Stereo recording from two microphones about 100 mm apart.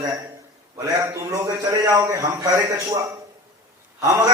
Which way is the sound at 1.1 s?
30° right (ahead or behind).